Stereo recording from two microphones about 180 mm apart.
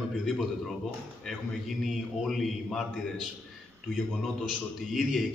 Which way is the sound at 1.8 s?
Centre (ahead or behind).